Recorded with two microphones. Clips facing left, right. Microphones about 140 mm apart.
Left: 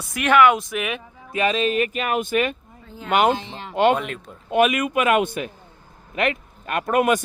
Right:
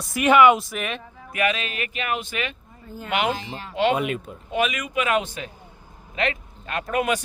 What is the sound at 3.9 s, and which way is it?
Speech, 5° right (ahead or behind).